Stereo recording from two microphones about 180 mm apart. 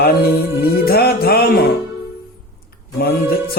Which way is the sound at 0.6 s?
60° left (ahead or behind).